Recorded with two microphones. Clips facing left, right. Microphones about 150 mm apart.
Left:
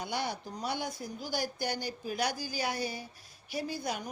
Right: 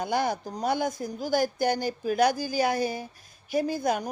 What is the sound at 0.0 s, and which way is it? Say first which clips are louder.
Speech: right 8 dB; 45° right (ahead or behind).